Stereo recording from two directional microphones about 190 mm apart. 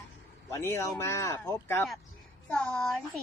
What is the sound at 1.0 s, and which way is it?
A woman's voice, 15° left (ahead or behind).